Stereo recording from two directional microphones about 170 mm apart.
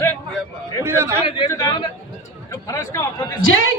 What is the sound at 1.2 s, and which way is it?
A man's voice, 30° left (ahead or behind).